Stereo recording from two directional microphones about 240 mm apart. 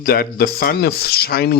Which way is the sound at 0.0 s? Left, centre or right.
Left.